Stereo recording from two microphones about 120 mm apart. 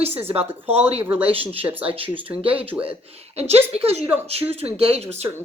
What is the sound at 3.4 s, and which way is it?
A woman's voice, 60° right (ahead or behind).